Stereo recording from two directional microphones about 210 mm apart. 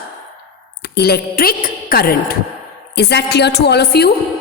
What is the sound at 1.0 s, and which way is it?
A woman's voice, 50° left (ahead or behind).